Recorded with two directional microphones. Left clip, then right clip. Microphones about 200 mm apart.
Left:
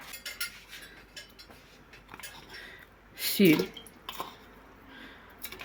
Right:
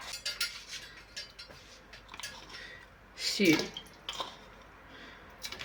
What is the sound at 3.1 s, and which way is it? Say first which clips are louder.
Drip: left 4 dB; 60° left (ahead or behind).